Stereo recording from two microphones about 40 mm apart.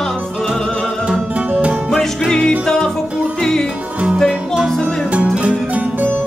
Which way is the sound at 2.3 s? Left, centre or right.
Left.